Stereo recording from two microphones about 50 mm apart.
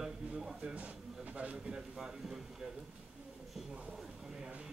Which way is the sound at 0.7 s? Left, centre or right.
Right.